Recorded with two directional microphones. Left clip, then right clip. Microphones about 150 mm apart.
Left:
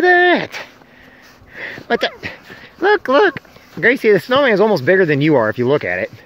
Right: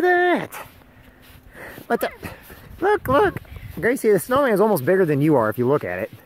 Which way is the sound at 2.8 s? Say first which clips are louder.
Left 5 dB; 10° right (ahead or behind).